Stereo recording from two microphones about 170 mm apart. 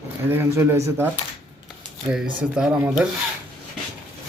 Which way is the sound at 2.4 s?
5° right (ahead or behind).